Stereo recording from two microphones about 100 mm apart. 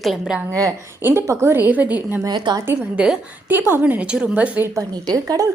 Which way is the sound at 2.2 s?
45° right (ahead or behind).